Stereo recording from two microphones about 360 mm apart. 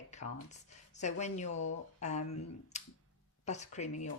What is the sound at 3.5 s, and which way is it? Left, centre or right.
Speech, centre.